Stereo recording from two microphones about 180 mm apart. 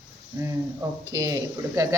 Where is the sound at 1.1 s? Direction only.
20° right (ahead or behind).